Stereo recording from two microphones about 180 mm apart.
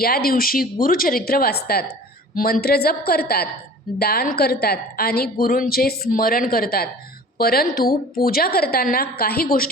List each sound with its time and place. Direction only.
0.0 s a woman's voice: 55° left (ahead or behind)